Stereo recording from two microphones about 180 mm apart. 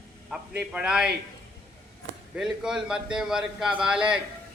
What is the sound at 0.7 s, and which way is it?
Speech, 5° right (ahead or behind).